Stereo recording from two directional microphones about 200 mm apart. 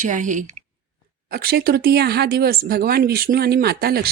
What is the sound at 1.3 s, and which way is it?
Speech, 50° right (ahead or behind).